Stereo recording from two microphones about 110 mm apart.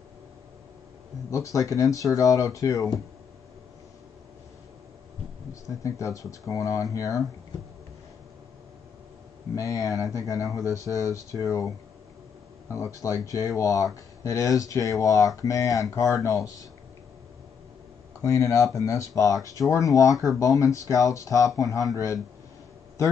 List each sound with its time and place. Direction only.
1.3 s speech: 30° left (ahead or behind)
5.5 s speech: 30° left (ahead or behind)
9.6 s speech: 30° left (ahead or behind)
12.7 s speech: 30° left (ahead or behind)
18.2 s speech: 30° left (ahead or behind)